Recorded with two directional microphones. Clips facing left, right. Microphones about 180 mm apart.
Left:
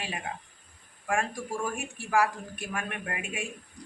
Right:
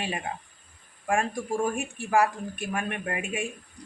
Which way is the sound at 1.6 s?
30° right (ahead or behind).